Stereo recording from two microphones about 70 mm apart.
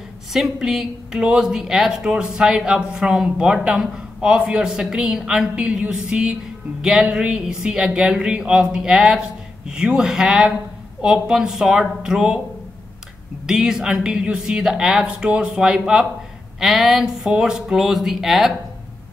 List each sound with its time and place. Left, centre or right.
0.3 s speech: centre
13.5 s speech: centre